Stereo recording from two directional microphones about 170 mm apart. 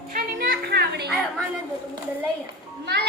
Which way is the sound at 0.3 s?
70° right (ahead or behind).